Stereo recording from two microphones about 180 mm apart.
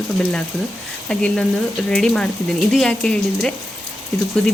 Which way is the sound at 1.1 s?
5° left (ahead or behind).